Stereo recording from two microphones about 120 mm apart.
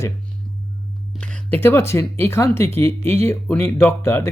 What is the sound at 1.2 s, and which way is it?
Speech, 10° left (ahead or behind).